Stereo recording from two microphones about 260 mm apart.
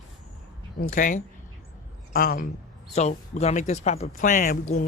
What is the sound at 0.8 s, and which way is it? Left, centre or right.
Speech, left.